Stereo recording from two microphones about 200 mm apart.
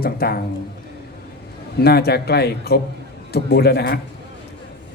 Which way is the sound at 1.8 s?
50° left (ahead or behind).